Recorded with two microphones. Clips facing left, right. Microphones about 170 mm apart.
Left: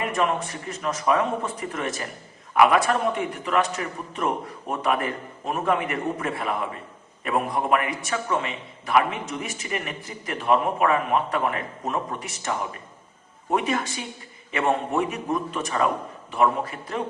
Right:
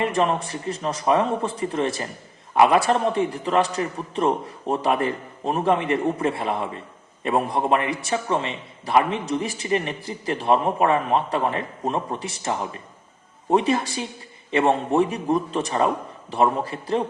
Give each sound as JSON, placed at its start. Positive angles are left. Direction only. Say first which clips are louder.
{"t": 0.0, "sound": "a man's voice", "louder": "right 3 dB", "side_deg": -30}